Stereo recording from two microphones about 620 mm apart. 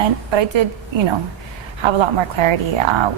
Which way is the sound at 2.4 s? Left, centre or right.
Right.